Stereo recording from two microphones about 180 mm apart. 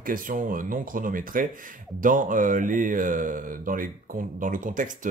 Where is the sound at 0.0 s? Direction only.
50° right (ahead or behind).